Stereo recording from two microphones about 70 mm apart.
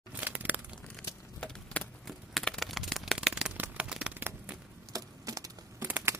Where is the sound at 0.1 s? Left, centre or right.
Right.